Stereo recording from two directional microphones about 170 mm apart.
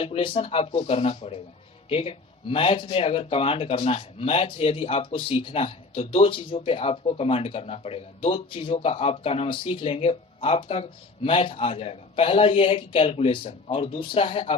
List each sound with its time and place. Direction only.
0.0 s speech: 35° left (ahead or behind)